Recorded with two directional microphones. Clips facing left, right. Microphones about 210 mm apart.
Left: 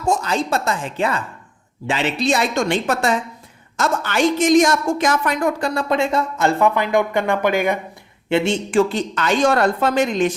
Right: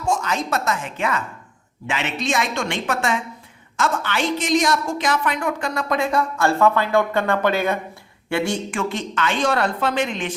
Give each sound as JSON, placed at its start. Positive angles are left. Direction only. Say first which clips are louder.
{"t": 0.0, "sound": "a woman's voice", "louder": "left 3 dB", "side_deg": 35}